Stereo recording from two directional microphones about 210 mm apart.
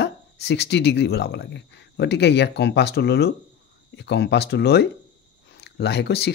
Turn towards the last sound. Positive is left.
turn(degrees=50)  # may be behind; listen again after turning